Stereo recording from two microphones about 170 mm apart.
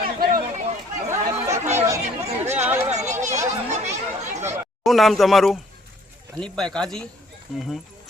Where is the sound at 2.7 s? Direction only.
10° right (ahead or behind).